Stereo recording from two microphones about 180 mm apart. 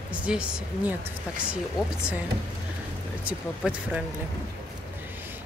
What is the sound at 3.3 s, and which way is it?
Speech, 5° right (ahead or behind).